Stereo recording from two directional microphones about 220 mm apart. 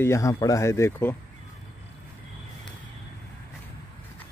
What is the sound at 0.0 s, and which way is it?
Speech, 15° left (ahead or behind).